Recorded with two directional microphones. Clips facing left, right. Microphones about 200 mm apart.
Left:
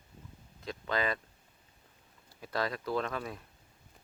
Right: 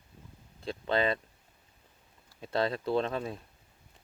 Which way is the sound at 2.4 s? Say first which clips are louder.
Right 4 dB; 25° right (ahead or behind).